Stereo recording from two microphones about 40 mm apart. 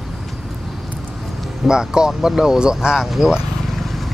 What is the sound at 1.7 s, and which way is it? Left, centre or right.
Speech, centre.